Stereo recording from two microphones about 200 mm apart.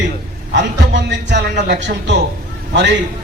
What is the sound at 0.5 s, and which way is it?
A man's voice, 60° right (ahead or behind).